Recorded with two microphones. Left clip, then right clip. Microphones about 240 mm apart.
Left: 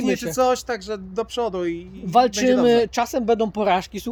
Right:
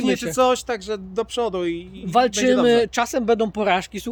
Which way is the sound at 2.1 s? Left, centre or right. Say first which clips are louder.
Even; centre.